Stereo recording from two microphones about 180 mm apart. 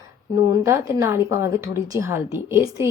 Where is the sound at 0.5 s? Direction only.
20° right (ahead or behind).